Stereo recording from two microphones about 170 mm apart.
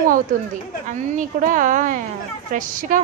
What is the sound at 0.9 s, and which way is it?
A woman's voice, 50° right (ahead or behind).